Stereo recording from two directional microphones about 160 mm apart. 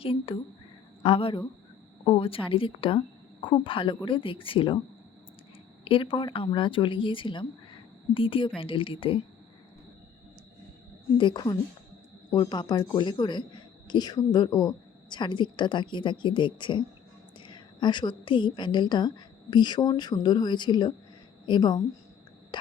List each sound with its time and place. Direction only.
0.0 s speech: 35° left (ahead or behind)
5.8 s speech: 35° left (ahead or behind)
11.2 s a woman's voice: 30° left (ahead or behind)
22.5 s a sound: 30° left (ahead or behind)